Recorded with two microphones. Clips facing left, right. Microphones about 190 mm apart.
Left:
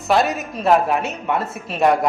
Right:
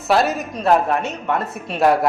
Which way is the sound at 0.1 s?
Centre (ahead or behind).